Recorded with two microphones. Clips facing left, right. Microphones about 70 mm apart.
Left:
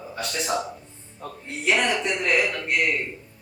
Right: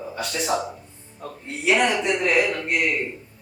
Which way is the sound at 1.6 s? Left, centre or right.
Centre.